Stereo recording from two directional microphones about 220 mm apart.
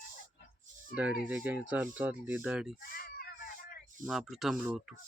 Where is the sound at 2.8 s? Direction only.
45° left (ahead or behind).